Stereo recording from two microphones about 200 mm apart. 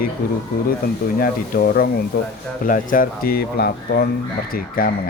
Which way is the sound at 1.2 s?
45° left (ahead or behind).